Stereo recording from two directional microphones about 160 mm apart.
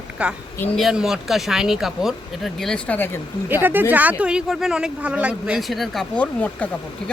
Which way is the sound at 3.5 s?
10° right (ahead or behind).